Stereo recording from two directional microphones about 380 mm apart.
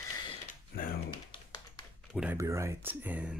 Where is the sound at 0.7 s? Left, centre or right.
Left.